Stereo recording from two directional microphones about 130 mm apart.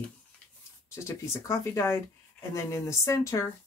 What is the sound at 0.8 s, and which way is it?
Speech, 20° left (ahead or behind).